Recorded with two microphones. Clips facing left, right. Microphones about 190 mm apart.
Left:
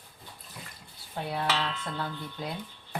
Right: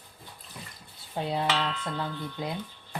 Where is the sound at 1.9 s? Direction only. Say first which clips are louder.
Right 2 dB; 20° right (ahead or behind).